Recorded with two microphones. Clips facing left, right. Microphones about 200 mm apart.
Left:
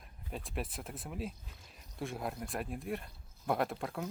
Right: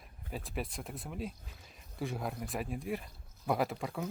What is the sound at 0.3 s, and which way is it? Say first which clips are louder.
Speech: right 1 dB; centre (ahead or behind).